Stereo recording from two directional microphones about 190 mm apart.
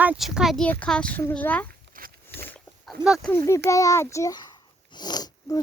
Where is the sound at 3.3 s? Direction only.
15° left (ahead or behind).